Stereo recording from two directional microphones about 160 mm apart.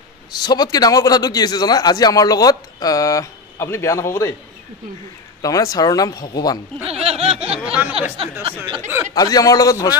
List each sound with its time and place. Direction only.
0.4 s a man's voice: 25° left (ahead or behind)
5.4 s a man's voice: 20° left (ahead or behind)
6.8 s speech: 40° right (ahead or behind)
7.6 s speech: 10° right (ahead or behind)
8.5 s speech: 30° right (ahead or behind)
9.1 s a man's voice: 25° left (ahead or behind)